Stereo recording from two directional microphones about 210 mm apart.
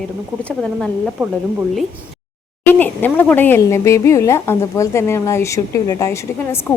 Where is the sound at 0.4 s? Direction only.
5° left (ahead or behind).